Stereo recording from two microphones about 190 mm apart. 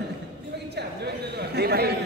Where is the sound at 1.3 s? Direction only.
60° right (ahead or behind).